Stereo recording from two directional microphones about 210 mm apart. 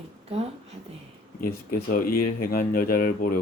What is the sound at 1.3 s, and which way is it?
Speech, 45° left (ahead or behind).